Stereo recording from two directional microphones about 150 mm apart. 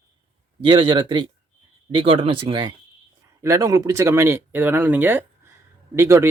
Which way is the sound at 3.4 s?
20° right (ahead or behind).